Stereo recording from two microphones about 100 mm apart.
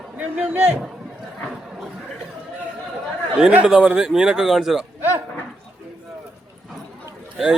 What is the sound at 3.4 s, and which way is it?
Speech, 10° right (ahead or behind).